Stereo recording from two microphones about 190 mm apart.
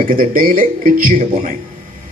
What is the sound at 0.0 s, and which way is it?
A man's voice, 45° right (ahead or behind).